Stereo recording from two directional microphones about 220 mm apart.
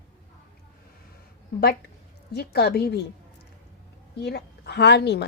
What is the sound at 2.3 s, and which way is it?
Speech, 50° left (ahead or behind).